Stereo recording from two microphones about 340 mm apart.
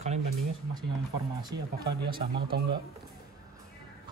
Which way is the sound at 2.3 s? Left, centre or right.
Right.